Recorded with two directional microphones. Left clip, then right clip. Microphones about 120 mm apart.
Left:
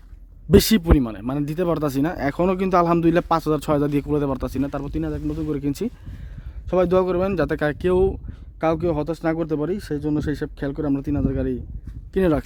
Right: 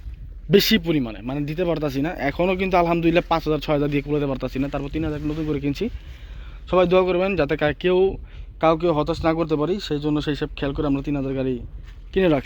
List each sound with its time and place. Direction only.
0.5 s speech: 70° left (ahead or behind)
8.6 s speech: 40° left (ahead or behind)